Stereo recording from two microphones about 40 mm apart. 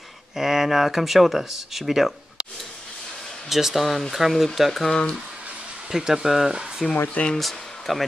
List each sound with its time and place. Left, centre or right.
0.4 s speech: centre
3.4 s speech: centre
4.8 s speech: centre
5.9 s speech: centre